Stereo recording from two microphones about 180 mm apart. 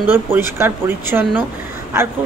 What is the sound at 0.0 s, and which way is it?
Speech, 10° right (ahead or behind).